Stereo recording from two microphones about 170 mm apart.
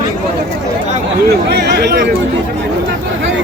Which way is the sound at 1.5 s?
80° right.